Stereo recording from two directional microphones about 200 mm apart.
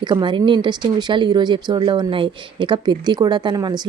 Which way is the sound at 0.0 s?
20° right (ahead or behind).